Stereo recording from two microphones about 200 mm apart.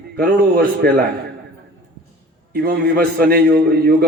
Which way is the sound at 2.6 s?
55° right (ahead or behind).